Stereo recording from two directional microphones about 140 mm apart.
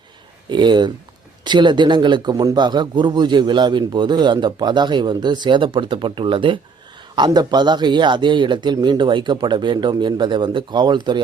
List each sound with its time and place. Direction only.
0.5 s a man's voice: 35° right (ahead or behind)